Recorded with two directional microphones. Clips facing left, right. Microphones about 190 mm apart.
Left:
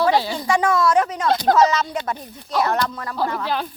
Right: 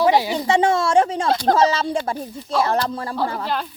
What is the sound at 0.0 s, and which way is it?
Speech, 15° right (ahead or behind).